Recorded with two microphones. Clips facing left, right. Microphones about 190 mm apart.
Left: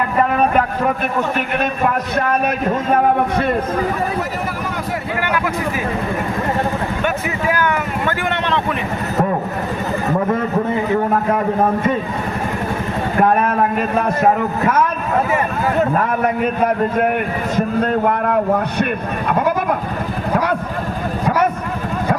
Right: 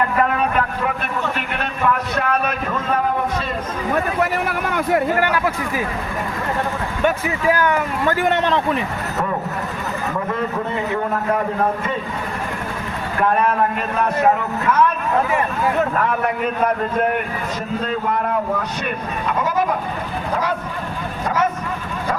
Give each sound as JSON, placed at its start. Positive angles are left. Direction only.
{"t": 2.9, "sound": "a sound", "side_deg": 60}
{"t": 4.2, "sound": "vehicle", "side_deg": -60}
{"t": 7.0, "sound": "speech", "side_deg": -35}
{"t": 17.7, "sound": "a man's voice", "side_deg": 55}